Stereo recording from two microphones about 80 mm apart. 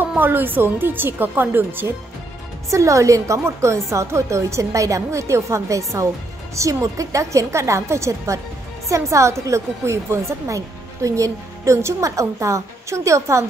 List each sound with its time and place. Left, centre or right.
0.2 s speech: right
2.7 s a woman's voice: right